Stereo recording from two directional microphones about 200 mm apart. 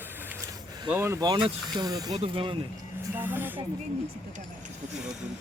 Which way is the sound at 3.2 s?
10° right (ahead or behind).